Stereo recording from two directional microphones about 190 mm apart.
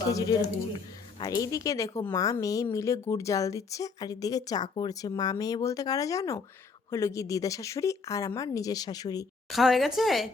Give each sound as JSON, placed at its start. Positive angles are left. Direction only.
{"t": 0.0, "sound": "a woman's voice", "side_deg": 20}
{"t": 9.5, "sound": "a woman's voice", "side_deg": 0}